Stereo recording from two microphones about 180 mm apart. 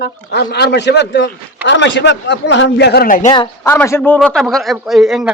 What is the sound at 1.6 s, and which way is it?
A man's voice, 90° left.